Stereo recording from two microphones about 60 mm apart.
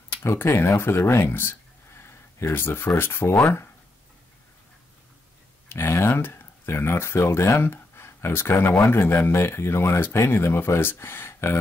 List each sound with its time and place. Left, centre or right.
0.2 s speech: left
5.7 s speech: left